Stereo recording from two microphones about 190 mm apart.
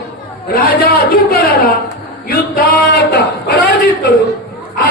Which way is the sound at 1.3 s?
50° left (ahead or behind).